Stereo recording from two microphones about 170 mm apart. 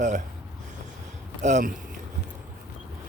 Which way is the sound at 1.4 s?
50° right (ahead or behind).